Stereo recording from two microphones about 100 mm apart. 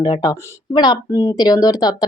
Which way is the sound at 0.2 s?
40° left (ahead or behind).